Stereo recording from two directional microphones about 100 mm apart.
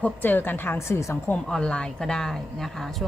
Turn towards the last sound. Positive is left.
turn(degrees=0)  # may be behind; listen again after turning